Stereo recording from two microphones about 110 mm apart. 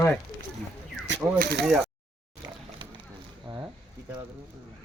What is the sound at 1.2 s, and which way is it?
Speech, 15° right (ahead or behind).